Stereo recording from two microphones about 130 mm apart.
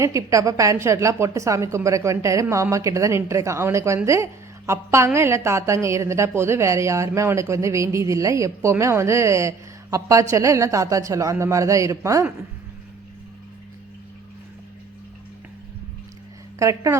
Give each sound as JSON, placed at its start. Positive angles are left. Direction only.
{"t": 0.0, "sound": "a woman's voice", "side_deg": -25}
{"t": 16.6, "sound": "a woman's voice", "side_deg": -25}